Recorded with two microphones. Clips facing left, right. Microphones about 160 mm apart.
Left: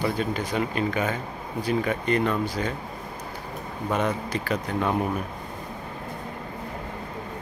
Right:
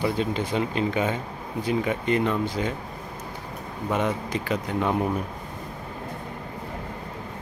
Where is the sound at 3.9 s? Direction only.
15° right (ahead or behind).